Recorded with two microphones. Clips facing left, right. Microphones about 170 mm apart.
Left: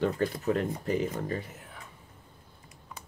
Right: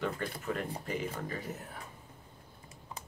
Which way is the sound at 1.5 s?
40° right (ahead or behind).